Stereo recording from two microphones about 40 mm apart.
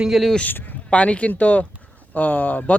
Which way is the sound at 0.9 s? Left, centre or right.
Left.